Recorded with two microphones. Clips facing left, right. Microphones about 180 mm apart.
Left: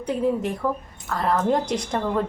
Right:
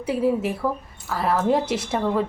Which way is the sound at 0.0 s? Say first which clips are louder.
Right 1 dB; 5° right (ahead or behind).